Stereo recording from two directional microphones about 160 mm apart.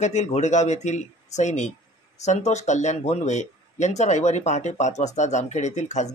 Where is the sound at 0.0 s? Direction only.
45° left (ahead or behind).